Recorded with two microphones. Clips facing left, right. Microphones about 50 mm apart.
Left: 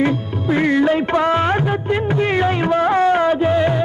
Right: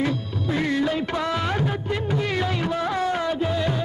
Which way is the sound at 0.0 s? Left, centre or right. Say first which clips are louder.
Left 7 dB; left.